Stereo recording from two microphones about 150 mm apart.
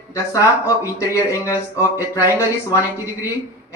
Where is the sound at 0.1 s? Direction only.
20° left (ahead or behind).